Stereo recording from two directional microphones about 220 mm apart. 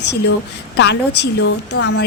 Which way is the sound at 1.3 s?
55° left (ahead or behind).